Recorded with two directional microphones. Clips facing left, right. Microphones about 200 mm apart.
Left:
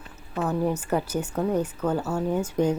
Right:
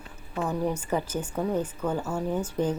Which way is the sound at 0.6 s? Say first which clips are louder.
Left 2 dB; 10° left (ahead or behind).